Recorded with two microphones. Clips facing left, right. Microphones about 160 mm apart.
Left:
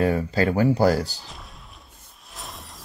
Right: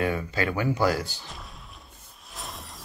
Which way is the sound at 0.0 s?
35° left (ahead or behind).